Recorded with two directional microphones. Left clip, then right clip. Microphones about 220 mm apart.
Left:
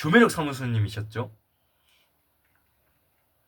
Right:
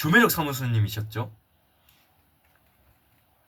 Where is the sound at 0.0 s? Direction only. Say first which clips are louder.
Even; 25° left (ahead or behind).